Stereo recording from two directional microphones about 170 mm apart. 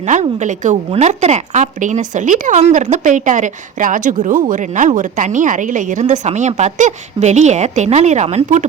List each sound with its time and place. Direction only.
0.1 s a woman's voice: 45° right (ahead or behind)